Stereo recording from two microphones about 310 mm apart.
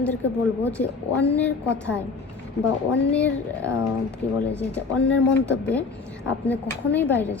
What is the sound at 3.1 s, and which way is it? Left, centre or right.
Speech, centre.